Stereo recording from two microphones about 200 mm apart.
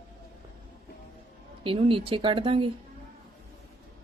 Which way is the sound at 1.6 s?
25° right (ahead or behind).